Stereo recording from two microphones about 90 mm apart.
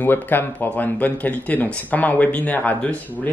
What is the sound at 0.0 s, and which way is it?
Speech, 20° left (ahead or behind).